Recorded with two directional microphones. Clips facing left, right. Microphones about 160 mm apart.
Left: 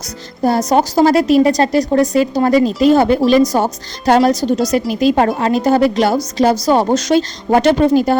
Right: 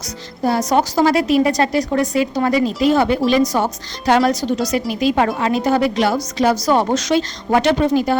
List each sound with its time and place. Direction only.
0.4 s a woman's voice: 40° left (ahead or behind)